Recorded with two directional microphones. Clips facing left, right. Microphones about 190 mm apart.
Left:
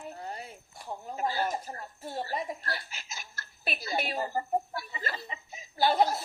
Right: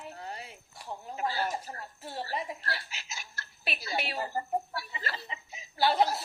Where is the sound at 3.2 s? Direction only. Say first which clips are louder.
Even; 45° left (ahead or behind).